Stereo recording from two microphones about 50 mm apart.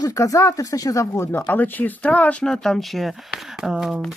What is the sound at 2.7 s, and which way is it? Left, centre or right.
Speech, centre.